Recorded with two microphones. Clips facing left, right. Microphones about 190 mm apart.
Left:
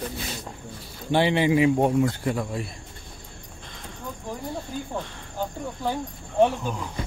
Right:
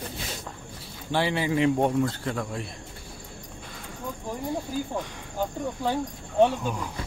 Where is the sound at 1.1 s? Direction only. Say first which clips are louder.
Left 5 dB; 20° left (ahead or behind).